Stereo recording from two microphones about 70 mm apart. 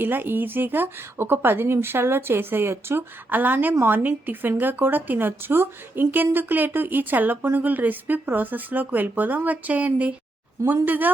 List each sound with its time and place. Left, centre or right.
0.0 s speech: right